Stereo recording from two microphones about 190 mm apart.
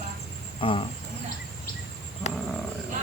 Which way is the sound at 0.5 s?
30° left (ahead or behind).